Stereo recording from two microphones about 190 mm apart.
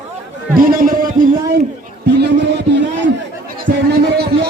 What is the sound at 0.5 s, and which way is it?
Speech, 50° right (ahead or behind).